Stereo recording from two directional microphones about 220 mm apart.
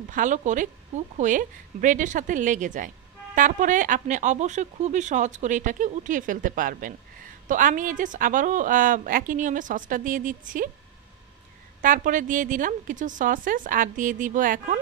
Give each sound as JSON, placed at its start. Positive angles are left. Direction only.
{"t": 0.1, "sound": "speech", "side_deg": -35}
{"t": 11.8, "sound": "speech", "side_deg": -35}